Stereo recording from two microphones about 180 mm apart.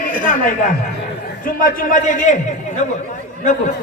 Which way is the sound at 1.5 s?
50° left (ahead or behind).